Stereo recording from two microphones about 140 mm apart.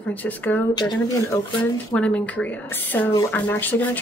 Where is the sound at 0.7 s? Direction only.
30° left (ahead or behind).